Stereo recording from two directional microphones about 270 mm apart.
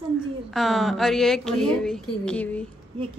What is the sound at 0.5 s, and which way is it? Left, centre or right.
A woman's voice, centre.